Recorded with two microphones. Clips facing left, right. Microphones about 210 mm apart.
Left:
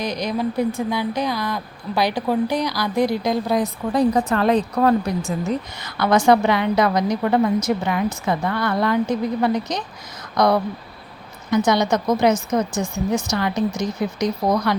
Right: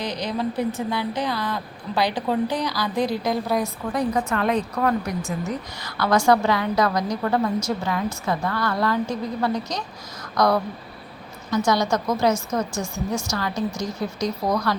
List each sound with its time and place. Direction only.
0.0 s a woman's voice: 10° left (ahead or behind)
3.9 s speech: 35° left (ahead or behind); by 14.8 s 20° left (ahead or behind)